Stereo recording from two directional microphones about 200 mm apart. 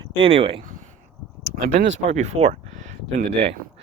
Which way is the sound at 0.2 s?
30° right (ahead or behind).